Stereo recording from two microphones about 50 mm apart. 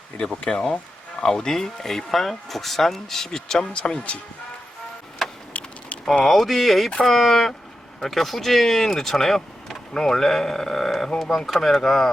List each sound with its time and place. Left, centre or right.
0.2 s speech: centre
3.6 s speech: left
5.5 s typing: left
6.2 s speech: centre